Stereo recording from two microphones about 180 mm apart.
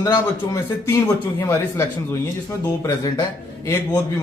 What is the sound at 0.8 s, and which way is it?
A man's voice, 15° left (ahead or behind).